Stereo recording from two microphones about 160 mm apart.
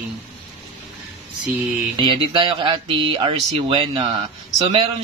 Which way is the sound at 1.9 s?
30° right (ahead or behind).